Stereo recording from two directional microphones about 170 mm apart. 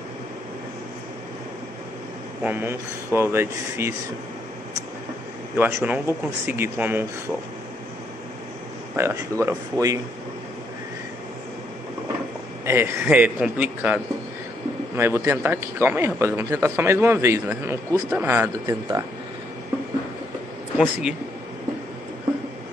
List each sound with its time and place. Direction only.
2.4 s speech: 15° right (ahead or behind)
5.6 s speech: 10° right (ahead or behind)
8.9 s speech: 15° right (ahead or behind)
12.6 s speech: 15° right (ahead or behind)
18.7 s speech: 20° right (ahead or behind)
20.7 s speech: 5° right (ahead or behind)